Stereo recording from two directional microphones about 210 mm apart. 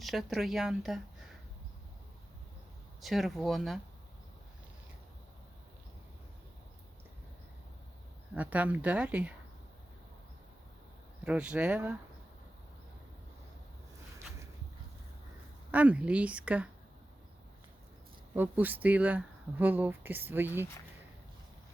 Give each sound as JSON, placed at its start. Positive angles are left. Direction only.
{"t": 0.0, "sound": "speech", "side_deg": 0}
{"t": 3.0, "sound": "speech", "side_deg": 0}
{"t": 8.4, "sound": "speech", "side_deg": -5}
{"t": 11.2, "sound": "speech", "side_deg": -5}
{"t": 15.7, "sound": "speech", "side_deg": -5}
{"t": 18.3, "sound": "speech", "side_deg": -10}